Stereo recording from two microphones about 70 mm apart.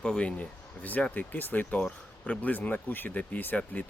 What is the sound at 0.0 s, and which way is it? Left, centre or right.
Speech, centre.